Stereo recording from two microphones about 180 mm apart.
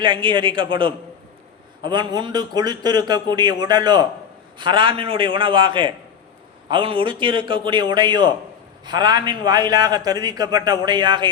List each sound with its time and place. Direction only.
0.0 s a man's voice: 25° right (ahead or behind)